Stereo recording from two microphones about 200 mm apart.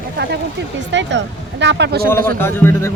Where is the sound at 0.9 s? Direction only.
65° right (ahead or behind).